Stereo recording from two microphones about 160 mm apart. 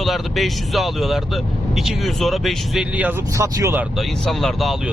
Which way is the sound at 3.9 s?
Centre (ahead or behind).